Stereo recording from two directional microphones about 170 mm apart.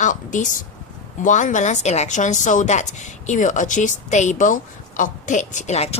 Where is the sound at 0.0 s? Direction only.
50° left (ahead or behind).